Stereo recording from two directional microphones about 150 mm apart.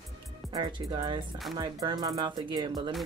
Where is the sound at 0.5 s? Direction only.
30° right (ahead or behind).